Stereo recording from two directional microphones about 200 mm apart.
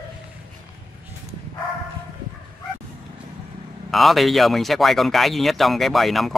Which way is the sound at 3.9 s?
Centre (ahead or behind).